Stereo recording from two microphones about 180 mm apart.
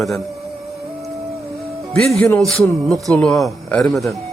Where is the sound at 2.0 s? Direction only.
5° left (ahead or behind).